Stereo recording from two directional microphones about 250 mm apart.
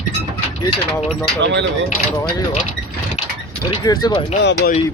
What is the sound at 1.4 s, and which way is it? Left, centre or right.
Speech, right.